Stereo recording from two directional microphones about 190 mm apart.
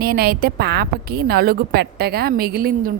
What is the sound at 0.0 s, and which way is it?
A woman's voice, 55° right (ahead or behind).